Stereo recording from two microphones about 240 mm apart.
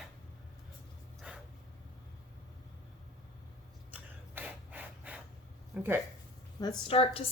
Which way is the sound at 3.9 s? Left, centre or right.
Centre.